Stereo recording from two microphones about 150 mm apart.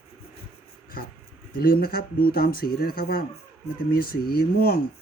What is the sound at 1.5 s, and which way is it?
Speech, 85° left.